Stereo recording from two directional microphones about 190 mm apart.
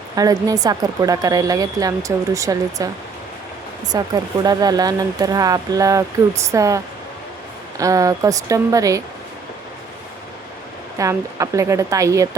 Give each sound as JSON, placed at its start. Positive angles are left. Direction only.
{"t": 0.2, "sound": "speech", "side_deg": -20}
{"t": 3.9, "sound": "speech", "side_deg": -20}
{"t": 10.9, "sound": "speech", "side_deg": -15}